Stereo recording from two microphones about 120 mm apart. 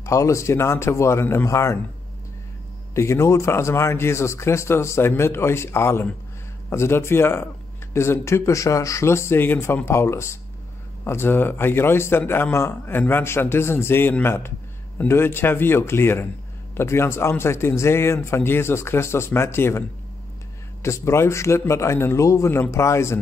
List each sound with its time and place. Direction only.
0.0 s speech: 25° left (ahead or behind)
2.9 s speech: 25° left (ahead or behind)
20.8 s speech: 25° left (ahead or behind)